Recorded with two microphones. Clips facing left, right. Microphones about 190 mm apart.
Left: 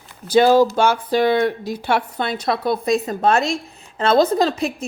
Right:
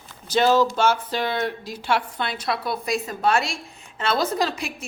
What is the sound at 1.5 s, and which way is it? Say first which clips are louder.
A woman's voice: left 4 dB; 60° left (ahead or behind).